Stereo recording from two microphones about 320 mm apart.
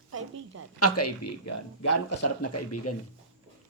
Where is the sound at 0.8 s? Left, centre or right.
Left.